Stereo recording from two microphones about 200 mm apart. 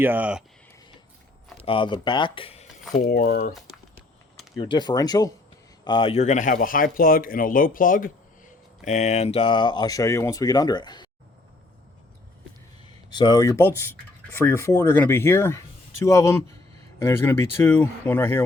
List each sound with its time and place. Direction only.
0.0 s speech: 10° right (ahead or behind)
1.6 s speech: 25° left (ahead or behind)
2.9 s speech: 45° left (ahead or behind)
4.5 s speech: 25° left (ahead or behind)
12.8 s speech: 20° left (ahead or behind)